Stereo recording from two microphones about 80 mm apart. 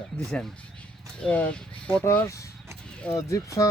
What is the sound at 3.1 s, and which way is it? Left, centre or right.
Speech, left.